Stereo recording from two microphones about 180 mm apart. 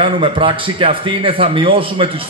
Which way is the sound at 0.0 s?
30° right (ahead or behind).